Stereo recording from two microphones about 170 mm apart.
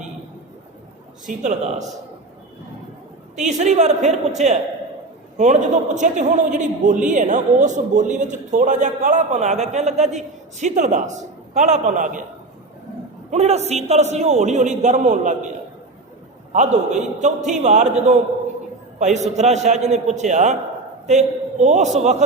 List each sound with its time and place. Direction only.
1.3 s speech: 45° right (ahead or behind)
3.3 s speech: 45° right (ahead or behind)
13.3 s speech: 40° right (ahead or behind)
16.5 s speech: 45° right (ahead or behind)
18.9 s speech: 45° right (ahead or behind)